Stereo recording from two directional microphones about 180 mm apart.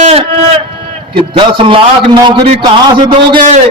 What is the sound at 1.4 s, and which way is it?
A man's voice, 30° right (ahead or behind).